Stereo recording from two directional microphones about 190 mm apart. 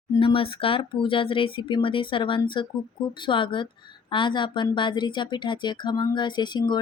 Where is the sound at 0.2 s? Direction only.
25° left (ahead or behind).